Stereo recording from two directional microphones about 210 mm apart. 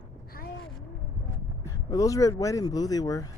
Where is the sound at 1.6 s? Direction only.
15° left (ahead or behind).